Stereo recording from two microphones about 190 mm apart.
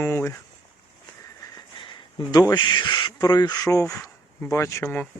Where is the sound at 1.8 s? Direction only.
25° left (ahead or behind).